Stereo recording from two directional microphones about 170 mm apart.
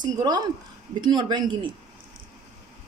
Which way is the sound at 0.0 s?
25° right (ahead or behind).